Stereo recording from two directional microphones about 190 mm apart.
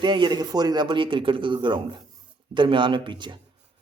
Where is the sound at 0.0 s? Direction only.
25° right (ahead or behind).